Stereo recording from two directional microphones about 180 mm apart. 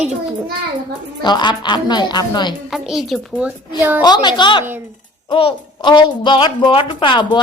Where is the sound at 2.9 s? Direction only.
Centre (ahead or behind).